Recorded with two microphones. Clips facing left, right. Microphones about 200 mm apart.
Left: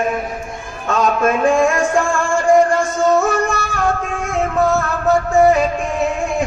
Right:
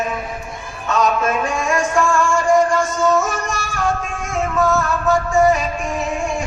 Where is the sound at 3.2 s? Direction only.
55° left (ahead or behind).